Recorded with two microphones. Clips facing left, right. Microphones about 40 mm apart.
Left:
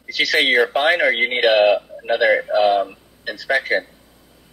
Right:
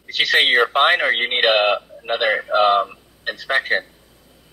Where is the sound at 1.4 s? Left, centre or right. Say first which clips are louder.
Left 3 dB; right.